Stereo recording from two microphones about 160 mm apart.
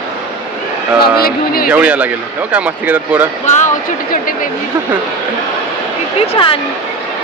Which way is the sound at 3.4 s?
50° left (ahead or behind).